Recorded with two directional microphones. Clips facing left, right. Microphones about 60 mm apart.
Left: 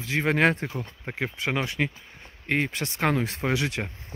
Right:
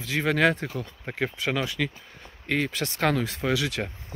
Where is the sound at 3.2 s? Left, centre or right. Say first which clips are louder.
Even; left.